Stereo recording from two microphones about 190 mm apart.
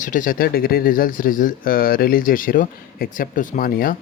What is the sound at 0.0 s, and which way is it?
Speech, 45° left (ahead or behind).